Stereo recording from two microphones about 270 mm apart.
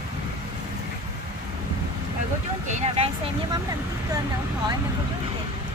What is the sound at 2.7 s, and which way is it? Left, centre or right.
Vehicle, right.